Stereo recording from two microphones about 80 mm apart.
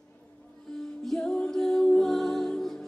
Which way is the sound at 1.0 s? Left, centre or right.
Centre.